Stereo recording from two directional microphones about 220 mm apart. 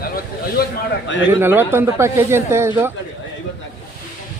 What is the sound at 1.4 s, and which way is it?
Speech, 10° right (ahead or behind).